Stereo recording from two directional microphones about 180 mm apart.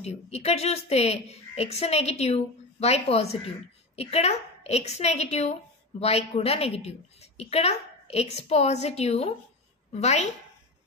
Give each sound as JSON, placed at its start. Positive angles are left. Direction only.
{"t": 0.0, "sound": "a woman's voice", "side_deg": 35}